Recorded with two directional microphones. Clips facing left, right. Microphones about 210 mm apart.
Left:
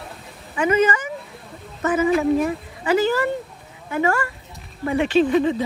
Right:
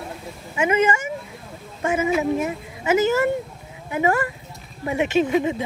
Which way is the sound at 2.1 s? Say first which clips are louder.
Left 4 dB; 5° right (ahead or behind).